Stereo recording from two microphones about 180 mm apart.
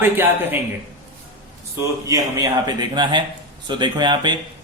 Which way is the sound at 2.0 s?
20° right (ahead or behind).